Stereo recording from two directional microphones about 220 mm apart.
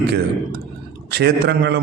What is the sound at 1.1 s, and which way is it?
Speech, 50° right (ahead or behind).